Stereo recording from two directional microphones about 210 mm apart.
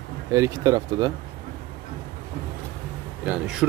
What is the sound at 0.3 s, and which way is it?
Speech, 15° right (ahead or behind).